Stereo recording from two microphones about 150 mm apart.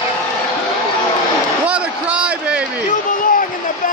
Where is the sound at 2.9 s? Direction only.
65° left (ahead or behind).